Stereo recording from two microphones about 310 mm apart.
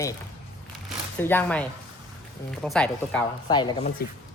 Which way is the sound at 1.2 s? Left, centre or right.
Centre.